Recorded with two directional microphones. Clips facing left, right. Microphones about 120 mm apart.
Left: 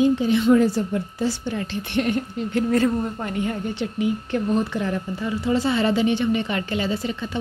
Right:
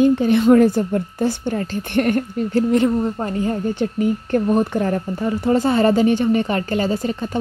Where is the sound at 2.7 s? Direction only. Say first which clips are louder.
Right 2 dB; 20° right (ahead or behind).